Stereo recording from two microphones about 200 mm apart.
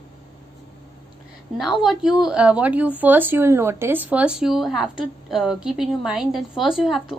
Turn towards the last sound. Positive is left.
turn(degrees=0)  # may be behind; listen again after turning